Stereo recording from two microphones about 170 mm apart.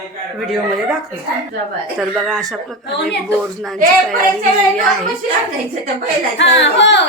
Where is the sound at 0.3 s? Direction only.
Centre (ahead or behind).